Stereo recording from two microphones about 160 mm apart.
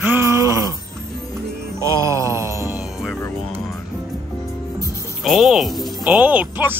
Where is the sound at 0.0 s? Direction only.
15° right (ahead or behind).